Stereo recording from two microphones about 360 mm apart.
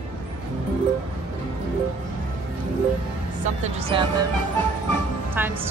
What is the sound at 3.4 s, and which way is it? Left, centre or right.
Music, centre.